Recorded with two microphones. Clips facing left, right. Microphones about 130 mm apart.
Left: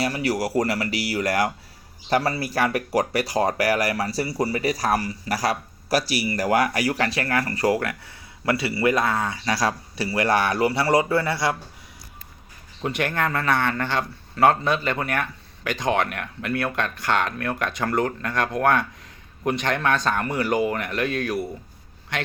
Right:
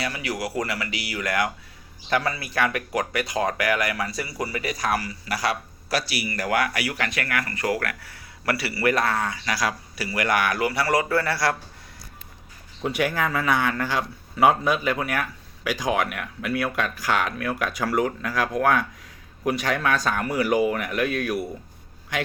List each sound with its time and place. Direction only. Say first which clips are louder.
0.0 s speech: left 5 dB; 40° left (ahead or behind); by 9.4 s 20° left (ahead or behind)
9.4 s speech: left 3 dB; 30° left (ahead or behind)
12.8 s a man's voice: even; 5° right (ahead or behind)